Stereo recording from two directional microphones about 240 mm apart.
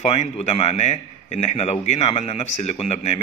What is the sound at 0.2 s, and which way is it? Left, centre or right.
A man's voice, left.